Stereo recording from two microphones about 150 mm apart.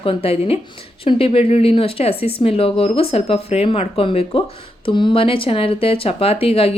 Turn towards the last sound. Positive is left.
turn(degrees=40)  # may be behind; listen again after turning